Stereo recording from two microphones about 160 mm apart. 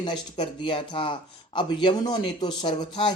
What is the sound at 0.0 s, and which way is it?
Speech, 30° left (ahead or behind).